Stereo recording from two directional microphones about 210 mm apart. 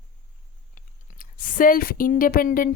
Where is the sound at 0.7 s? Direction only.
40° left (ahead or behind).